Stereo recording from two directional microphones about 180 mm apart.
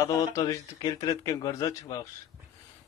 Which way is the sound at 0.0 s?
20° left (ahead or behind).